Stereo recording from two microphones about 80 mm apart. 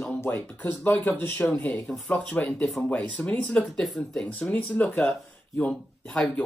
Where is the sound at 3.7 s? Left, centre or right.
Centre.